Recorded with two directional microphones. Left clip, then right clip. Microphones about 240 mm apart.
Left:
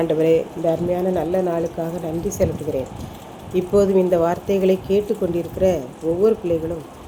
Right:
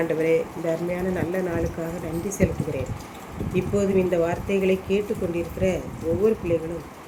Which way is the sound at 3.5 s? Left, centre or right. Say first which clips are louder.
Left 6 dB; left.